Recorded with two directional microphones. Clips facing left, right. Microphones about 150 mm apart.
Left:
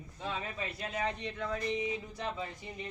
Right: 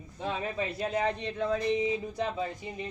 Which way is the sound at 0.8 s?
30° right (ahead or behind).